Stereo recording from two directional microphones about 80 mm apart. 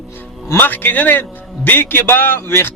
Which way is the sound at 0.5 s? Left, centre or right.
Left.